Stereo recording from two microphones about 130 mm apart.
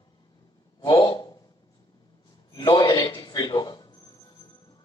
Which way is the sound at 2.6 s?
30° left (ahead or behind).